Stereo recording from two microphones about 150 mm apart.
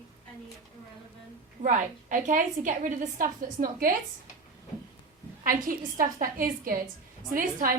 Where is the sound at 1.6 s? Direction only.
60° right (ahead or behind).